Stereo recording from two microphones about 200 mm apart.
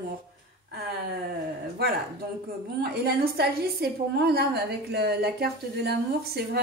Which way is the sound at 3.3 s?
55° right (ahead or behind).